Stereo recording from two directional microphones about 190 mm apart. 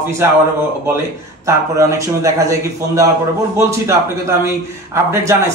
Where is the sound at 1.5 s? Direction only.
15° right (ahead or behind).